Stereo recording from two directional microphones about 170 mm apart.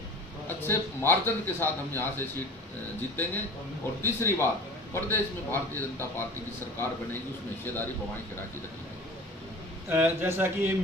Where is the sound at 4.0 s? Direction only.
15° left (ahead or behind).